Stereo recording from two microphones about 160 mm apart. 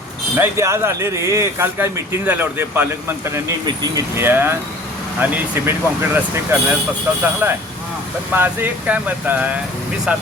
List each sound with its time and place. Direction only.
0.3 s speech: 15° right (ahead or behind)